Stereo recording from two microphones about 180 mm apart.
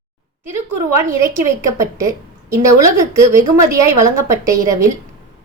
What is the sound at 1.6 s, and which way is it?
A woman's voice, 15° right (ahead or behind).